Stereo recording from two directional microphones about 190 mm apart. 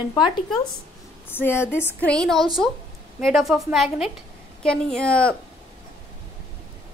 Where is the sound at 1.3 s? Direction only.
10° left (ahead or behind).